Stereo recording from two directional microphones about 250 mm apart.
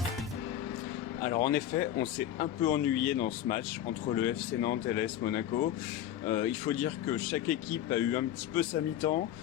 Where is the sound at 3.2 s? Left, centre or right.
Left.